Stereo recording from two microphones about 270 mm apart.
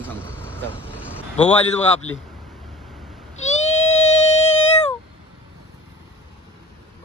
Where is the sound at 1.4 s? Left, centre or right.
Left.